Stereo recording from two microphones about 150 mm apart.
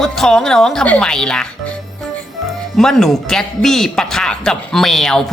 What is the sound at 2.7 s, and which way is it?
A man's voice, 5° left (ahead or behind).